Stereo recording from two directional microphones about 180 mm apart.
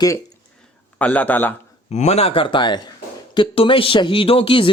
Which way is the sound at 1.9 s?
35° left (ahead or behind).